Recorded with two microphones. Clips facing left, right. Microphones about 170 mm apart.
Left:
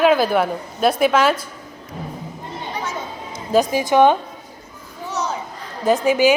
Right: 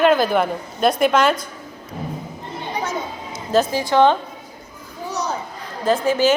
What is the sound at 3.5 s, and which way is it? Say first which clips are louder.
Speech: left 1 dB; 15° left (ahead or behind).